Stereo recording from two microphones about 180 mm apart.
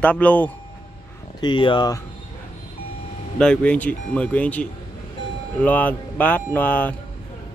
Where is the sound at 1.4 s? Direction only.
25° left (ahead or behind).